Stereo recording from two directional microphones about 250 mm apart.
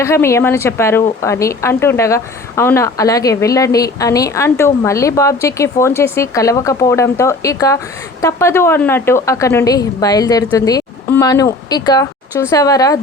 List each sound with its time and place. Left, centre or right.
0.0 s a woman's voice: centre